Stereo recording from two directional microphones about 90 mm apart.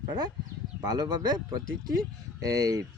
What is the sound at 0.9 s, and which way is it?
Speech, 50° right (ahead or behind).